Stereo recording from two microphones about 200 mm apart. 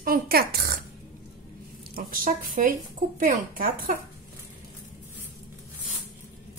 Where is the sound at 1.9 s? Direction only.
45° right (ahead or behind).